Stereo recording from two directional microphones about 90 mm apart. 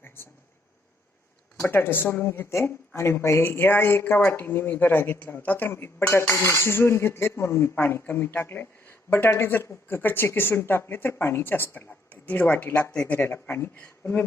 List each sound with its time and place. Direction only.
1.6 s speech: 25° left (ahead or behind)